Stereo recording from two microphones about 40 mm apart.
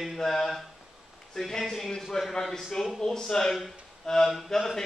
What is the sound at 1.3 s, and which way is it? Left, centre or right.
A man's voice, centre.